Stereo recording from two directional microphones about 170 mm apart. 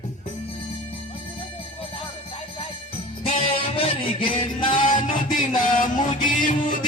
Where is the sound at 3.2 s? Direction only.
35° left (ahead or behind).